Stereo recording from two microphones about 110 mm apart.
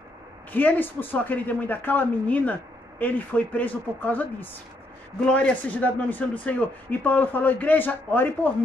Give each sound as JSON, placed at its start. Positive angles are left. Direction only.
{"t": 0.5, "sound": "a man's voice", "side_deg": 15}